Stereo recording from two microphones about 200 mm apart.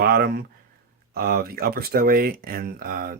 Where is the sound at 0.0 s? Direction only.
50° right (ahead or behind).